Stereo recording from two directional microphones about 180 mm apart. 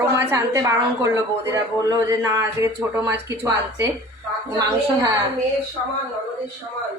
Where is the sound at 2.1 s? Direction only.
15° right (ahead or behind).